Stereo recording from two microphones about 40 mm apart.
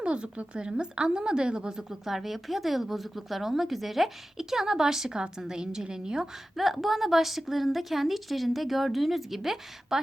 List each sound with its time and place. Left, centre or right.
0.0 s a woman's voice: right
1.9 s a woman's voice: centre
6.6 s a woman's voice: centre